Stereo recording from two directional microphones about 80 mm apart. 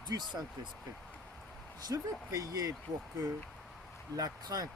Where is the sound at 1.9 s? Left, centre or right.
Right.